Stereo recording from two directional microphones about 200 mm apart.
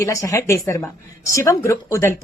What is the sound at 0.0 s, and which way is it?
Speech, 15° left (ahead or behind).